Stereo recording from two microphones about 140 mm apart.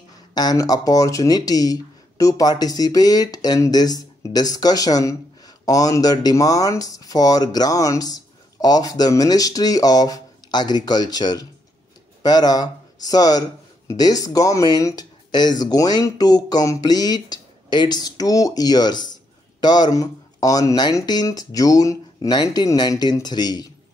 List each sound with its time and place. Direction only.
0.3 s speech: 30° left (ahead or behind)